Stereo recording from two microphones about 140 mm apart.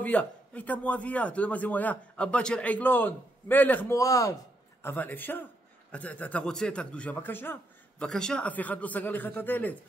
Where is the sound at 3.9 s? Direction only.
25° left (ahead or behind).